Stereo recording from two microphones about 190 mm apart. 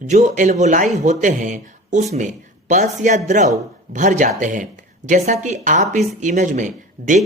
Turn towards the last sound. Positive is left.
turn(degrees=-40)  # may be behind; listen again after turning